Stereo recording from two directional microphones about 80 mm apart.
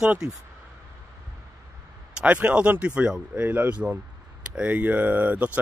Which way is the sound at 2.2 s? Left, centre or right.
Centre.